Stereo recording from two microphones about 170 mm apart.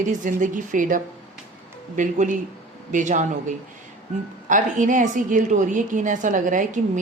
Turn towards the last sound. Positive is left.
turn(degrees=-50)  # may be behind; listen again after turning